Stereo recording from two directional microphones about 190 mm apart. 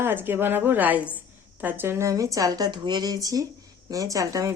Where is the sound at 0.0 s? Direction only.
10° right (ahead or behind).